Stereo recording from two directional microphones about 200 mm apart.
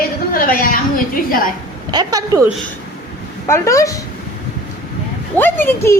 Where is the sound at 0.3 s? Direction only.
45° left (ahead or behind).